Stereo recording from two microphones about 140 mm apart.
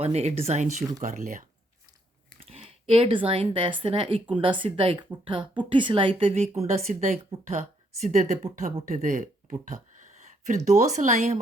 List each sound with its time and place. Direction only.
0.0 s speech: 50° right (ahead or behind)
2.4 s speech: 45° right (ahead or behind); by 9.7 s 65° right (ahead or behind)
10.2 s a sound: 60° right (ahead or behind)
10.7 s speech: 55° right (ahead or behind)